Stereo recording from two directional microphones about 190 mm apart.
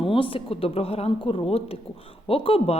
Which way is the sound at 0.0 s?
30° left (ahead or behind).